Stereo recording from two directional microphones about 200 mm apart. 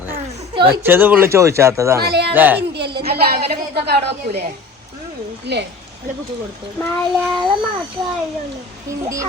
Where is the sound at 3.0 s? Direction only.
50° right (ahead or behind).